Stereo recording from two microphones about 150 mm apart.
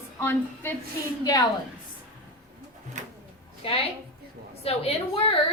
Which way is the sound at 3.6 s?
40° left (ahead or behind).